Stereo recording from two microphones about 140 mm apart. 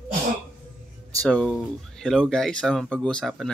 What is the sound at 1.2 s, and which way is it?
Speech, 5° left (ahead or behind).